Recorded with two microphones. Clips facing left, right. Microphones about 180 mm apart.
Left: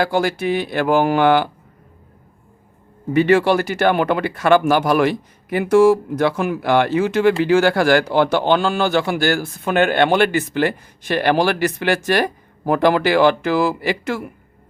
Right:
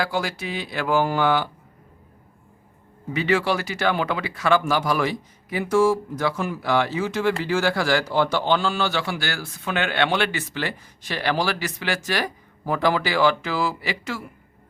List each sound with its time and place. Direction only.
0.0 s a man's voice: 55° left (ahead or behind)
3.1 s a man's voice: 55° left (ahead or behind)